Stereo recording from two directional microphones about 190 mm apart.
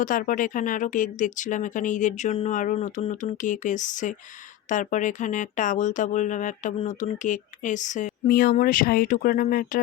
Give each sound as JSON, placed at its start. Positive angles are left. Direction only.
{"t": 0.0, "sound": "speech", "side_deg": 45}